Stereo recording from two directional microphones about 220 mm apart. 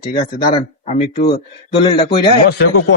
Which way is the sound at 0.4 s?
30° left (ahead or behind).